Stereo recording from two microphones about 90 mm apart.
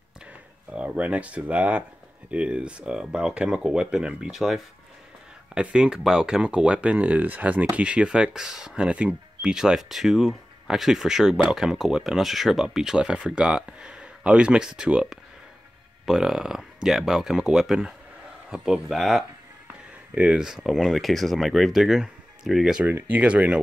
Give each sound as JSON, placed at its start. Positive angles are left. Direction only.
{"t": 0.3, "sound": "speech", "side_deg": -15}
{"t": 22.8, "sound": "speech", "side_deg": -20}